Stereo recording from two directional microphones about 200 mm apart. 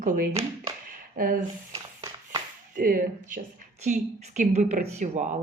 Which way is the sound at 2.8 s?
45° right (ahead or behind).